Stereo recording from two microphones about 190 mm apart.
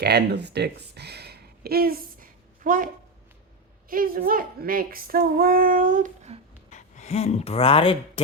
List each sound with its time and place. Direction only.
0.0 s speech: 60° right (ahead or behind); by 6.4 s 40° right (ahead or behind)
6.7 s speech: 40° left (ahead or behind)